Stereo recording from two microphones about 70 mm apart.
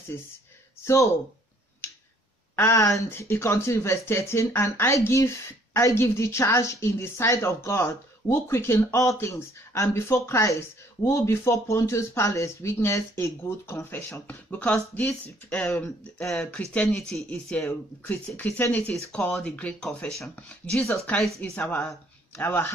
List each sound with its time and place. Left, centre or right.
2.5 s a woman's voice: left
2.8 s speech: left
3.1 s speech: left
13.8 s speech: left
16.9 s speech: centre; by 22.7 s left